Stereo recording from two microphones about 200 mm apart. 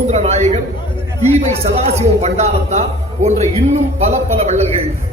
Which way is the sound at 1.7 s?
35° right (ahead or behind).